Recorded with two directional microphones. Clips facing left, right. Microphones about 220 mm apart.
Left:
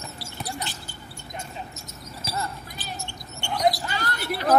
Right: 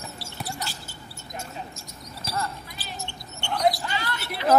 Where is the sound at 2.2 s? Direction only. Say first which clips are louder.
Right 1 dB; centre (ahead or behind).